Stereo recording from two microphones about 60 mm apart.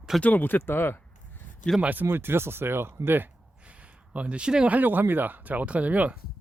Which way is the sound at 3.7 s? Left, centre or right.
Right.